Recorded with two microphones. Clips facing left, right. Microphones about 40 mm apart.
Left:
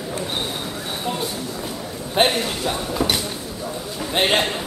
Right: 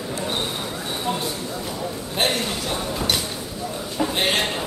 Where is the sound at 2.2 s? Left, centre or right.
Left.